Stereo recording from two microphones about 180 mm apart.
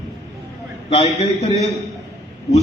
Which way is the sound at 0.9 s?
35° left (ahead or behind).